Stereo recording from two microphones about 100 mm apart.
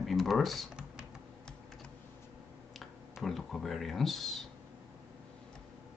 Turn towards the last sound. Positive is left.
turn(degrees=0)  # may be behind; listen again after turning